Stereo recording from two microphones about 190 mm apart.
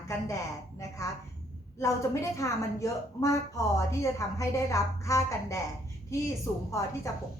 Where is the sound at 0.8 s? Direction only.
15° left (ahead or behind).